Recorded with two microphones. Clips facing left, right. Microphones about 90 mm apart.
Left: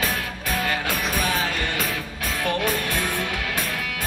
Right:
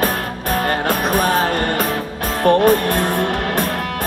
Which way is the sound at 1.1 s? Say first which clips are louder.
Right 9 dB; 45° right (ahead or behind).